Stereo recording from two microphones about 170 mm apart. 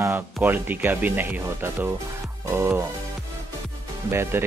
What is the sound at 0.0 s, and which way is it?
Speech, 10° right (ahead or behind).